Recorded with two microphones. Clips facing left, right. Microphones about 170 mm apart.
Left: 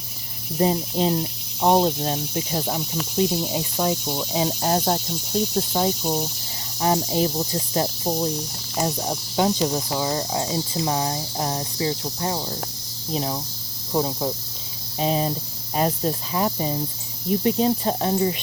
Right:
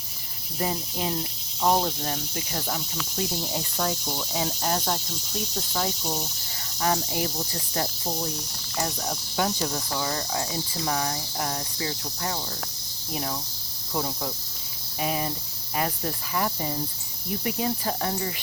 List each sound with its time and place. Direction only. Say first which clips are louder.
0.6 s speech: left 8 dB; 25° left (ahead or behind)
3.2 s cricket: left 8 dB; 15° left (ahead or behind)
4.3 s speech: left 6 dB; 25° left (ahead or behind)